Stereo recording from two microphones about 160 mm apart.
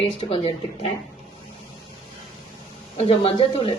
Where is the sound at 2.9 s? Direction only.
35° left (ahead or behind).